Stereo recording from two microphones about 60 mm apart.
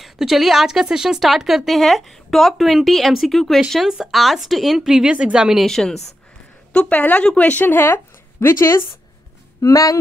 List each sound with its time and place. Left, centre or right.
0.0 s a woman's voice: centre
5.7 s a woman's voice: centre
7.0 s a woman's voice: left
9.6 s speech: left